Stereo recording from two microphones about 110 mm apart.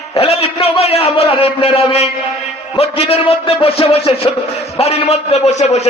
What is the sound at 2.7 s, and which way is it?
A man's voice, 65° left (ahead or behind).